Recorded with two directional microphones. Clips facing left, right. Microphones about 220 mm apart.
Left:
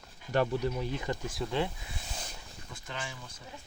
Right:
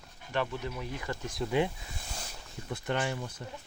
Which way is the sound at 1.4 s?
Centre (ahead or behind).